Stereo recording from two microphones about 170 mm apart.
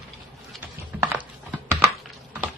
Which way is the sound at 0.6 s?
10° right (ahead or behind).